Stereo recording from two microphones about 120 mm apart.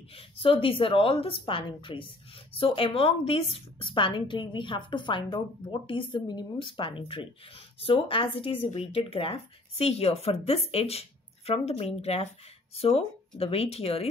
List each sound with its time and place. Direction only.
0.1 s a woman's voice: 50° left (ahead or behind)